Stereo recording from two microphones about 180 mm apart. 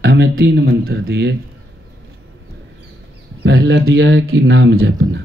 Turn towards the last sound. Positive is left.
turn(degrees=-85)